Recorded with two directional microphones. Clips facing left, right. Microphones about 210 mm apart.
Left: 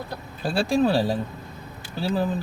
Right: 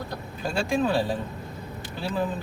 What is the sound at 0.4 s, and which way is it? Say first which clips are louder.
Speech: left 4 dB; 35° left (ahead or behind).